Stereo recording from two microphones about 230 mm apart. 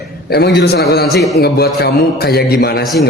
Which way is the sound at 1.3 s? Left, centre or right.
Left.